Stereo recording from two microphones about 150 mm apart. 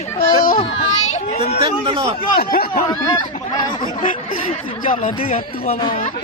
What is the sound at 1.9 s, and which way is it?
Speech, 30° right (ahead or behind).